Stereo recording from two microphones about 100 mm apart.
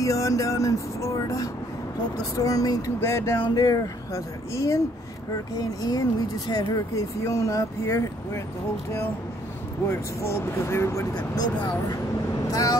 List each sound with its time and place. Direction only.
0.0 s music: 35° left (ahead or behind)
3.0 s speech: 25° left (ahead or behind)
3.4 s music: 40° left (ahead or behind)
9.8 s speech: 25° left (ahead or behind)